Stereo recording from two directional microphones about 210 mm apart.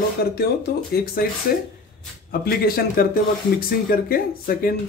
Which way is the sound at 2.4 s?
45° left (ahead or behind).